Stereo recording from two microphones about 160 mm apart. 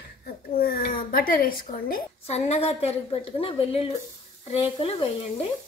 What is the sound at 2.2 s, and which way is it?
A woman's voice, 40° left (ahead or behind).